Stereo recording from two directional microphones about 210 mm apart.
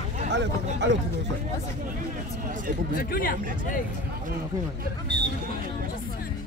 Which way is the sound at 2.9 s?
45° left (ahead or behind).